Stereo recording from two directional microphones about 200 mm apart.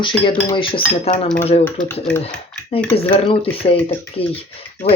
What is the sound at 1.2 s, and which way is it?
Stir, 5° left (ahead or behind).